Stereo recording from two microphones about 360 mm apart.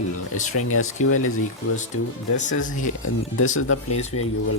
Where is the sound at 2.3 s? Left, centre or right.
Left.